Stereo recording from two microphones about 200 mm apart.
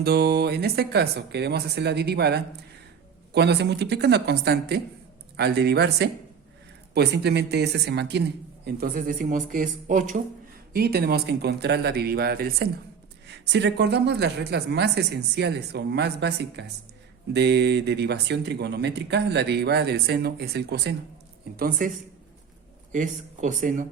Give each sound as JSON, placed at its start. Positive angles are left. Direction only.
{"t": 0.0, "sound": "speech", "side_deg": -50}
{"t": 10.7, "sound": "speech", "side_deg": -50}
{"t": 22.9, "sound": "speech", "side_deg": -40}